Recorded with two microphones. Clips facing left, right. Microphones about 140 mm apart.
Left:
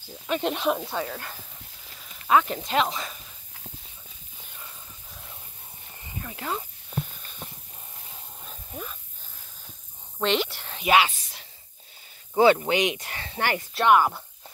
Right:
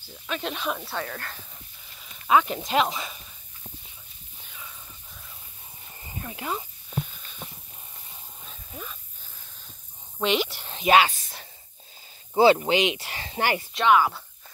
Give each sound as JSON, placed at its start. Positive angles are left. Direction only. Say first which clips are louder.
{"t": 0.3, "sound": "speech", "louder": "left 5 dB", "side_deg": 15}
{"t": 2.2, "sound": "speech", "louder": "even", "side_deg": -10}
{"t": 6.2, "sound": "speech", "louder": "right 1 dB", "side_deg": -20}
{"t": 8.5, "sound": "a sound", "louder": "left 2 dB", "side_deg": 5}
{"t": 10.2, "sound": "speech", "louder": "even", "side_deg": -15}
{"t": 11.1, "sound": "a sound", "louder": "right 3 dB", "side_deg": -45}
{"t": 12.5, "sound": "speech", "louder": "right 1 dB", "side_deg": -30}
{"t": 13.7, "sound": "speech", "louder": "left 1 dB", "side_deg": 10}